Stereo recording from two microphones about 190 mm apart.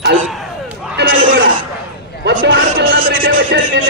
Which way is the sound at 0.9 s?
80° right.